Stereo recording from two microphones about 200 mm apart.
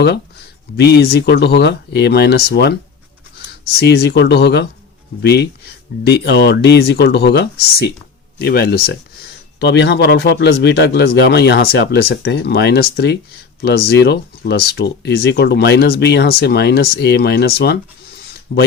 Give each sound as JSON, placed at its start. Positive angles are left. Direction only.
{"t": 0.8, "sound": "speech", "side_deg": 55}
{"t": 3.8, "sound": "speech", "side_deg": 55}